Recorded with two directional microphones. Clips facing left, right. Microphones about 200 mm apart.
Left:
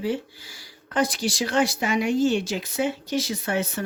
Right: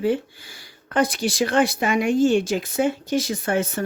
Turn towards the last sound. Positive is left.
turn(degrees=-50)  # may be behind; listen again after turning